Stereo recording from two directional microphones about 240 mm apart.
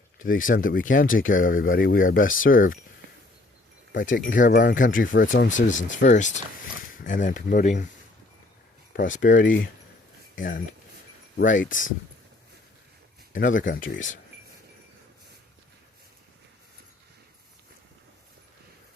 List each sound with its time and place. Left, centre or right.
0.2 s speech: left
3.9 s speech: left
8.9 s speech: left
13.3 s speech: left